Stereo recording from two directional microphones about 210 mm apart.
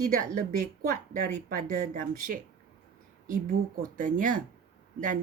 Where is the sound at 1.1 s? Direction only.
40° right (ahead or behind).